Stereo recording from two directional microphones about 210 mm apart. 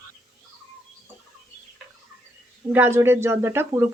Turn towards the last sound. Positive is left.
turn(degrees=-10)  # may be behind; listen again after turning